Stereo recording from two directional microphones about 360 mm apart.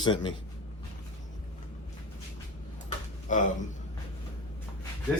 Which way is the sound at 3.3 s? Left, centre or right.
Left.